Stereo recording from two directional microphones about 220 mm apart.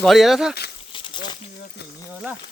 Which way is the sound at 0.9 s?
20° left (ahead or behind).